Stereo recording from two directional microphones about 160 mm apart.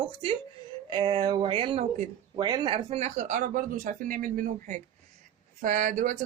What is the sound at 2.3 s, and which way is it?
Speech, 25° right (ahead or behind).